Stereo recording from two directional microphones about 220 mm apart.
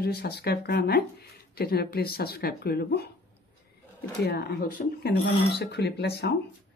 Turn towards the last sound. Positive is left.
turn(degrees=45)  # may be behind; listen again after turning